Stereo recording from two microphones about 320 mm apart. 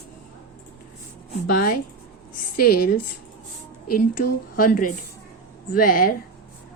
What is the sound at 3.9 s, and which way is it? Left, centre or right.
Speech, left.